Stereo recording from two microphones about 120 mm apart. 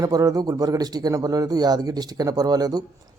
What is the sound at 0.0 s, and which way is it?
Speech, 30° right (ahead or behind).